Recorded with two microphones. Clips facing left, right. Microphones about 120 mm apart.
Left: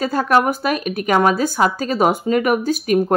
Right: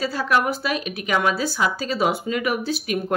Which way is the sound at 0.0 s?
50° left (ahead or behind).